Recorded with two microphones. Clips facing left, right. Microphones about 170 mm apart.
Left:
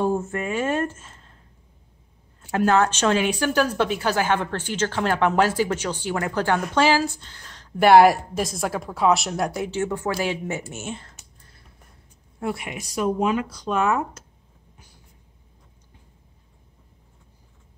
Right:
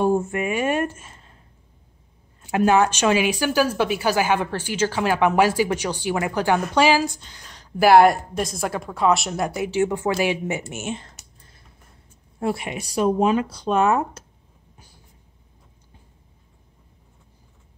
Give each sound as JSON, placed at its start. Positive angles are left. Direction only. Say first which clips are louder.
{"t": 0.0, "sound": "a woman's voice", "louder": "right 3 dB", "side_deg": -15}
{"t": 2.5, "sound": "a woman's voice", "louder": "right 2 dB", "side_deg": -10}
{"t": 7.7, "sound": "a woman's voice", "louder": "even", "side_deg": 0}
{"t": 9.7, "sound": "a woman's voice", "louder": "right 4 dB", "side_deg": -15}
{"t": 12.4, "sound": "speech", "louder": "right 3 dB", "side_deg": -30}